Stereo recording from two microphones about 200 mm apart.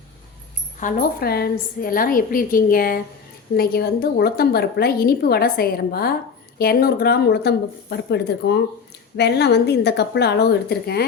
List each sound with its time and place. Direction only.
0.8 s a woman's voice: 45° left (ahead or behind)